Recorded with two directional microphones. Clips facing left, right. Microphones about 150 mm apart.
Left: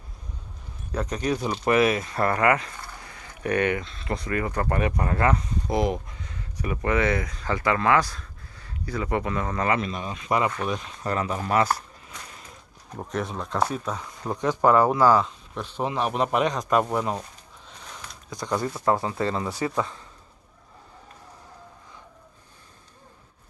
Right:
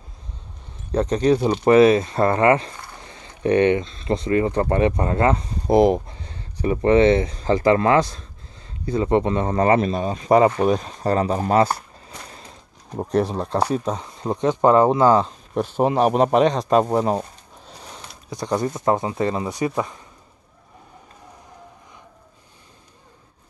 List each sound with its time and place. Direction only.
0.9 s speech: 30° right (ahead or behind)
15.2 s speech: 45° right (ahead or behind); by 20.0 s 15° right (ahead or behind)